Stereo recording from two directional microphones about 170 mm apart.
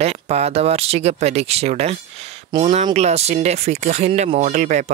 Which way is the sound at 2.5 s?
30° right (ahead or behind).